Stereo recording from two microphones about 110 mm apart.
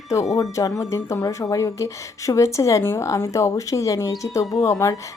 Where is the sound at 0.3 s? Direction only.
30° left (ahead or behind).